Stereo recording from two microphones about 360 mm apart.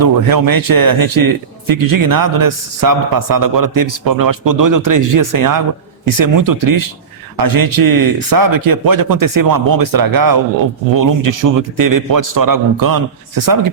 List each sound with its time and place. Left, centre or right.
0.0 s a man's voice: right